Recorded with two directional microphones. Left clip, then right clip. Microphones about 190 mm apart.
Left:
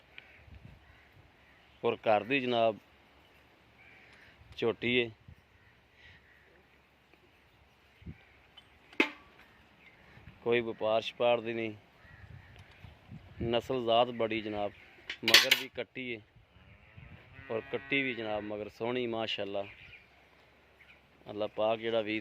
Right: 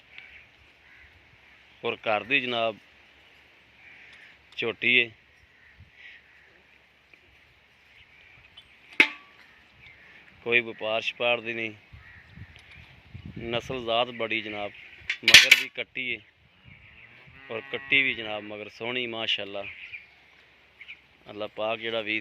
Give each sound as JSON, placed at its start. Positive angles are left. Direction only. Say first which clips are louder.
{"t": 1.8, "sound": "speech", "louder": "right 1 dB", "side_deg": 15}
{"t": 4.5, "sound": "speech", "louder": "right 7 dB", "side_deg": 20}
{"t": 10.4, "sound": "speech", "louder": "right 5 dB", "side_deg": 15}
{"t": 13.4, "sound": "speech", "louder": "right 1 dB", "side_deg": 15}
{"t": 15.7, "sound": "speech", "louder": "right 8 dB", "side_deg": 15}
{"t": 17.5, "sound": "speech", "louder": "right 8 dB", "side_deg": 15}
{"t": 21.2, "sound": "speech", "louder": "right 1 dB", "side_deg": 15}